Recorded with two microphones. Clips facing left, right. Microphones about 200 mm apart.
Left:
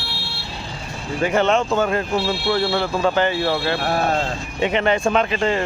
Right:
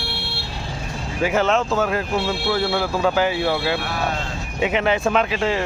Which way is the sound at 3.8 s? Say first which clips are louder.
Left 5 dB; 50° left (ahead or behind).